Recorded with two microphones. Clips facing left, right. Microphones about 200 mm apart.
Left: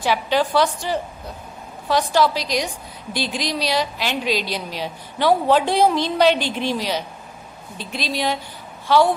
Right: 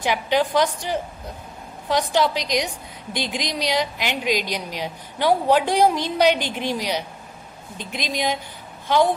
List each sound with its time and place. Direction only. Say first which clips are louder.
0.1 s a woman's voice: left 1 dB; 15° right (ahead or behind)